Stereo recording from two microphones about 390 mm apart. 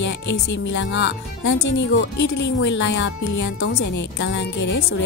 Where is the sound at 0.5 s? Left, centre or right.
Left.